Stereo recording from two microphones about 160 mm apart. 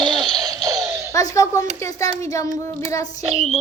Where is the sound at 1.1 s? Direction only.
20° left (ahead or behind).